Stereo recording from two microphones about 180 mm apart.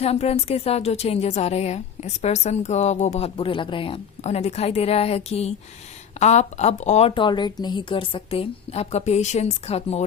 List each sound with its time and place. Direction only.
0.0 s a woman's voice: 35° left (ahead or behind)
7.1 s a woman's voice: 25° left (ahead or behind)